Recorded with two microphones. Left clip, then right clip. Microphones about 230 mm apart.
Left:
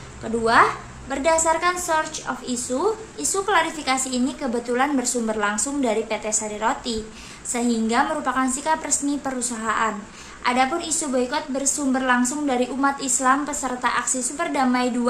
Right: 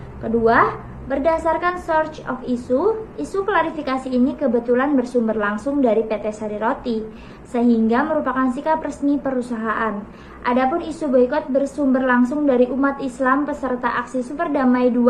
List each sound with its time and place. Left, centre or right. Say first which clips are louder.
0.3 s a woman's voice: right 2 dB; centre